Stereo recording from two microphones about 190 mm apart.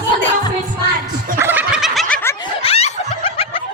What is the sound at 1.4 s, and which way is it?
Gobble, 10° right (ahead or behind).